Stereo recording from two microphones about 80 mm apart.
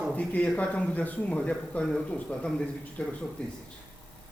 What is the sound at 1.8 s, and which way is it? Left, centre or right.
Speech, centre.